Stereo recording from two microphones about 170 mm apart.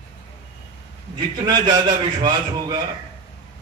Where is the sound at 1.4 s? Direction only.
25° right (ahead or behind).